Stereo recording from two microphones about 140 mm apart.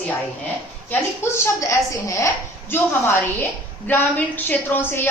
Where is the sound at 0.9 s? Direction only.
15° left (ahead or behind).